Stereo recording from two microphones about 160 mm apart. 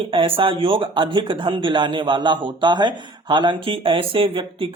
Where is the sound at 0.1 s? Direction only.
35° right (ahead or behind).